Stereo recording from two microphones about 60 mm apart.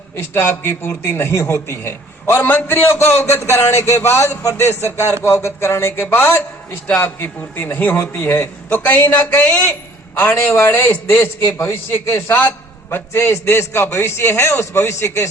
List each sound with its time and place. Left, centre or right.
0.2 s a man's voice: left
10.3 s a man's voice: left